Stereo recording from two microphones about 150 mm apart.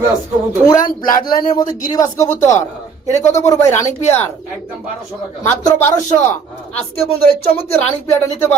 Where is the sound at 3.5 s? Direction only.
20° left (ahead or behind).